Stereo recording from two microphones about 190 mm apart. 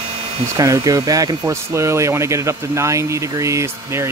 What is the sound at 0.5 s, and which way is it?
Speech, 20° right (ahead or behind).